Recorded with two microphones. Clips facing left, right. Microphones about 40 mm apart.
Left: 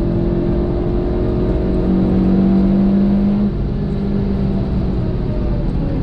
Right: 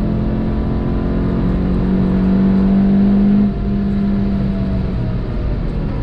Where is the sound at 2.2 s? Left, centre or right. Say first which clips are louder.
Even; centre.